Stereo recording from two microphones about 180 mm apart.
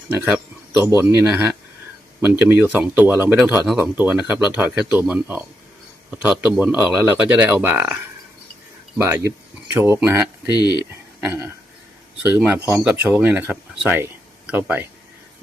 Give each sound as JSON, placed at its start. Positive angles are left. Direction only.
{"t": 0.2, "sound": "speech", "side_deg": -5}
{"t": 6.4, "sound": "speech", "side_deg": -5}
{"t": 9.0, "sound": "speech", "side_deg": -15}
{"t": 10.6, "sound": "speech", "side_deg": 25}
{"t": 11.2, "sound": "speech", "side_deg": -15}